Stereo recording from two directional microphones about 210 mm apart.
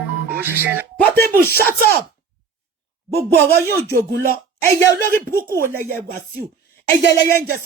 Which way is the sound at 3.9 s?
50° right (ahead or behind).